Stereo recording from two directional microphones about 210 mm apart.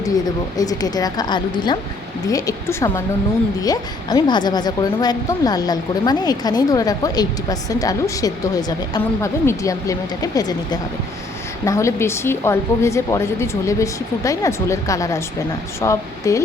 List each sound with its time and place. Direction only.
0.5 s speech: 20° left (ahead or behind)